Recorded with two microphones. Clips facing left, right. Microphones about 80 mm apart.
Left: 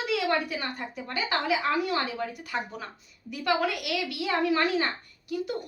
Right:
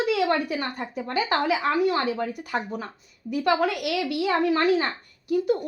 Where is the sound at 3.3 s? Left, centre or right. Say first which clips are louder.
Right 4 dB; right.